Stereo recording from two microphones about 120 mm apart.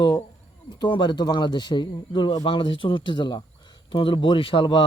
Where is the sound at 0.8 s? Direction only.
40° left (ahead or behind).